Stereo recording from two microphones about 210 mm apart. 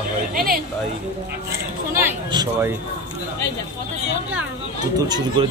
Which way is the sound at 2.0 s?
15° right (ahead or behind).